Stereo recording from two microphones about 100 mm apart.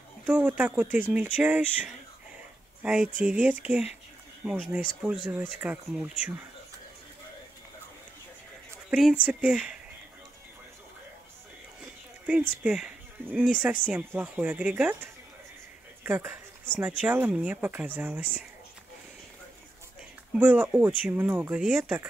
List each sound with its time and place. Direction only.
0.3 s speech: 10° right (ahead or behind)
5.9 s speech: 5° right (ahead or behind)
9.1 s speech: 10° right (ahead or behind)
12.3 s speech: 10° right (ahead or behind)
16.0 s speech: 25° right (ahead or behind)
20.3 s speech: 20° right (ahead or behind)